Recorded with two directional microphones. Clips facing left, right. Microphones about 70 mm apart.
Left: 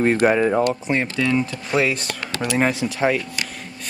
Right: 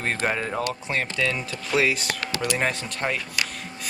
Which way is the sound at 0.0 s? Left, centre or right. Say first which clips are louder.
Left 9 dB; centre.